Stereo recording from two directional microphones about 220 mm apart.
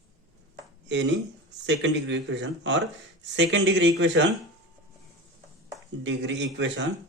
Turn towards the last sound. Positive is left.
turn(degrees=-55)  # may be behind; listen again after turning